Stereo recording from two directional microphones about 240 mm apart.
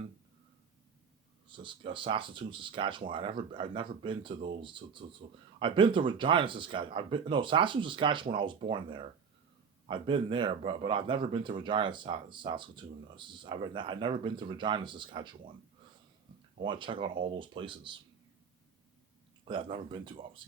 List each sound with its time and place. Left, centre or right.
1.5 s speech: right
16.6 s speech: centre
19.5 s speech: right